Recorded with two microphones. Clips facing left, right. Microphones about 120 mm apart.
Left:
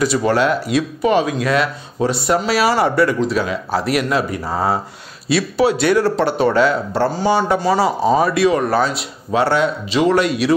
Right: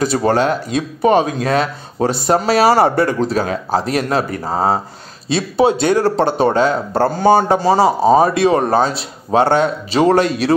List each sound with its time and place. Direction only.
0.1 s speech: 35° right (ahead or behind)
6.9 s speech: 45° right (ahead or behind)
7.4 s speech: 30° right (ahead or behind)